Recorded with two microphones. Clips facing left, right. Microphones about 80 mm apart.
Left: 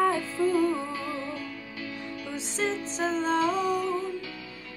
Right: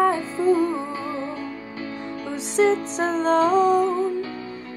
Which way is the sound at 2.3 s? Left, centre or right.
Right.